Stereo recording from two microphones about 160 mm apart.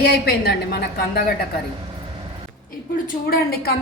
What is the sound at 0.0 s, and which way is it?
Speech, 85° left.